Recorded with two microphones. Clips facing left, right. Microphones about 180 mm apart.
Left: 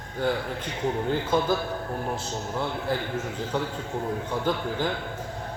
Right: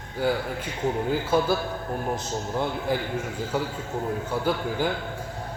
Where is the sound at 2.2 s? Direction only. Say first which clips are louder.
Right 2 dB; 15° right (ahead or behind).